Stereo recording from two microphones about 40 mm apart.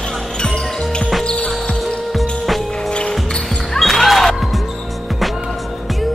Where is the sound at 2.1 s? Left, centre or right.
Centre.